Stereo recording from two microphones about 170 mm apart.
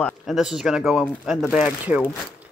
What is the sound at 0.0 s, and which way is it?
A man's voice, centre (ahead or behind).